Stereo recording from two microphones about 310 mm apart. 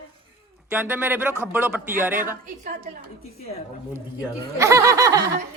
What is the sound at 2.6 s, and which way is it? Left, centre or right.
Speech, right.